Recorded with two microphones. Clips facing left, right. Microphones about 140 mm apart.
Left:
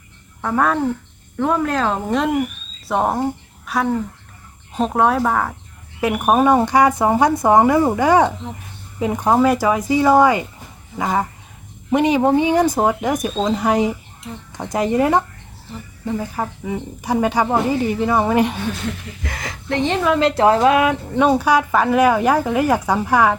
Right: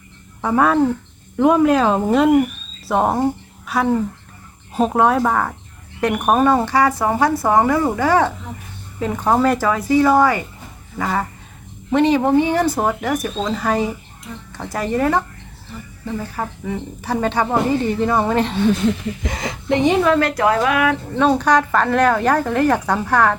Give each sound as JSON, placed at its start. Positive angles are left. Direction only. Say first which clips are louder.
{"t": 0.4, "sound": "speech", "louder": "right 3 dB", "side_deg": -5}
{"t": 19.2, "sound": "a woman's voice", "louder": "right 4 dB", "side_deg": -20}
{"t": 20.1, "sound": "speech", "louder": "left 2 dB", "side_deg": 25}
{"t": 21.2, "sound": "speech", "louder": "even", "side_deg": 10}